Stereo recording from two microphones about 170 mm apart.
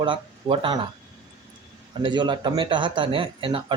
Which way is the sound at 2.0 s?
25° right (ahead or behind).